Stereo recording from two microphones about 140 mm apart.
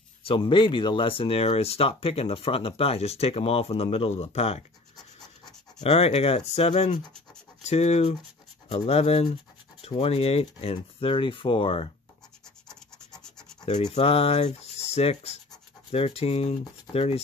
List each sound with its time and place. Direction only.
0.2 s speech: 35° left (ahead or behind)
5.8 s speech: 45° left (ahead or behind)
12.6 s scratch: 5° left (ahead or behind)
13.9 s speech: 45° left (ahead or behind)